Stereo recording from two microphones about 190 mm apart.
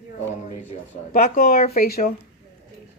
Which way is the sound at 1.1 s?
50° left (ahead or behind).